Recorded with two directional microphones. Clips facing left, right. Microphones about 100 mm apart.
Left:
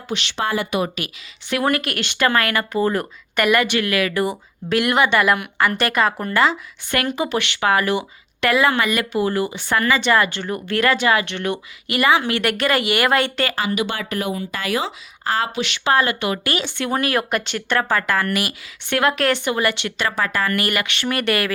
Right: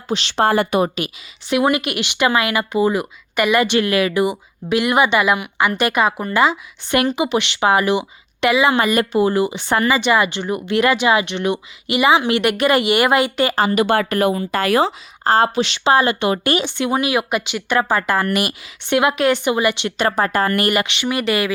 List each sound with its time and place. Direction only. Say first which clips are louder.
0.1 s speech: right 6 dB; 35° right (ahead or behind)
0.5 s a woman's voice: right 5 dB; 55° right (ahead or behind)
0.8 s a woman's voice: right 5 dB; 25° right (ahead or behind)
1.5 s speech: right 3 dB; 15° right (ahead or behind)
3.5 s a woman's voice: right 3 dB; 25° right (ahead or behind)
4.1 s speech: right 3 dB; 10° right (ahead or behind)
6.9 s a woman's voice: right 4 dB; 20° right (ahead or behind)
8.8 s speech: right 4 dB; 40° right (ahead or behind)
9.1 s a woman's voice: right 4 dB; 20° right (ahead or behind)
13.6 s a woman's voice: right 7 dB; 45° right (ahead or behind); by 19.9 s 15° right (ahead or behind)
20.0 s speech: right 5 dB; 35° right (ahead or behind)
21.0 s speech: right 2 dB; 5° right (ahead or behind)